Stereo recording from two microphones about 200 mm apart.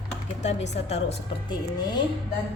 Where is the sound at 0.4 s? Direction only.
35° left (ahead or behind).